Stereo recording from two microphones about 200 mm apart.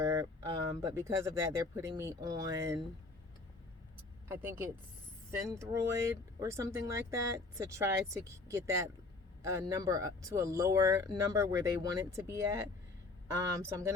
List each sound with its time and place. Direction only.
0.0 s speech: 15° right (ahead or behind)
4.3 s speech: 10° right (ahead or behind)